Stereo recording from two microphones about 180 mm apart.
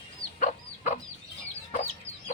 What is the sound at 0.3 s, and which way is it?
Chicken, 45° left (ahead or behind).